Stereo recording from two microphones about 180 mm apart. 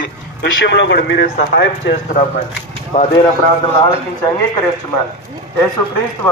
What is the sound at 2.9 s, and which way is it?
Speech, 40° left (ahead or behind).